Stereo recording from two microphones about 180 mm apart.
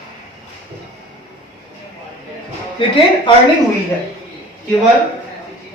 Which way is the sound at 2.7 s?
30° left (ahead or behind).